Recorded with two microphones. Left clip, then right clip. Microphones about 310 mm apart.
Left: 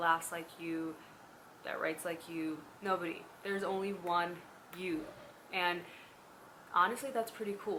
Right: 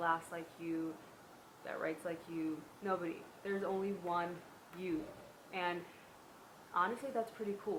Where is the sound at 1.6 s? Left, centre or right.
Centre.